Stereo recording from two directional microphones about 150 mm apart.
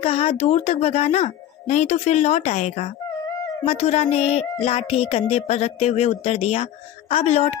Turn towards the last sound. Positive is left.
turn(degrees=45)  # may be behind; listen again after turning